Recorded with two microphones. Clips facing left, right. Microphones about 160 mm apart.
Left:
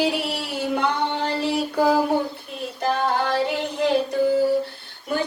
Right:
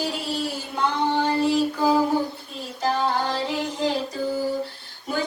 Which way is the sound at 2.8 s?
60° left (ahead or behind).